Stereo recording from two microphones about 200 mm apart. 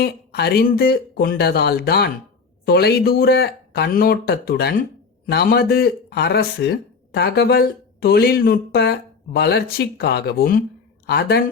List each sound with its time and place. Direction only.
0.0 s speech: 55° left (ahead or behind)